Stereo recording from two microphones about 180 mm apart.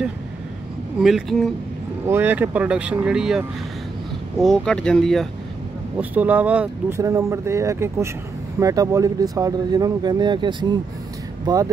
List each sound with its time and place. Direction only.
1.0 s speech: centre (ahead or behind)
2.0 s speech: 10° right (ahead or behind)
5.9 s speech: 10° right (ahead or behind); by 10.8 s 25° right (ahead or behind)